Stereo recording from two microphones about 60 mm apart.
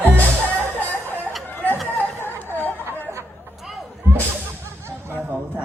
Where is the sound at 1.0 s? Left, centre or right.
Right.